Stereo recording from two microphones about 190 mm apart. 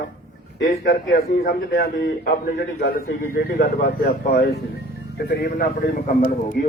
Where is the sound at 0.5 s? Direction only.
65° left (ahead or behind).